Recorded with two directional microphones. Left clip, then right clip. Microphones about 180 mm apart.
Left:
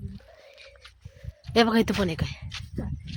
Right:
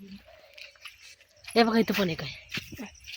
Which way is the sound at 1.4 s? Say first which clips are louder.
Left 2 dB; 5° left (ahead or behind).